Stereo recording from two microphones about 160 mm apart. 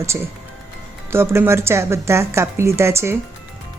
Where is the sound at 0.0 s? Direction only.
15° right (ahead or behind).